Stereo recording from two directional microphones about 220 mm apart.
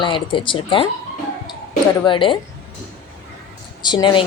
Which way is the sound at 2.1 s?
20° left (ahead or behind).